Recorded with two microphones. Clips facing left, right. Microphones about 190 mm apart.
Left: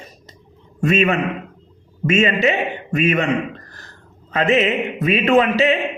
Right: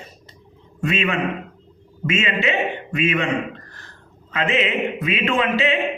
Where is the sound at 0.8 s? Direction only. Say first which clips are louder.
Left 5 dB; 40° left (ahead or behind).